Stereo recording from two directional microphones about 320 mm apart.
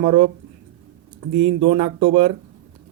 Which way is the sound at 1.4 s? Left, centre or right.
Centre.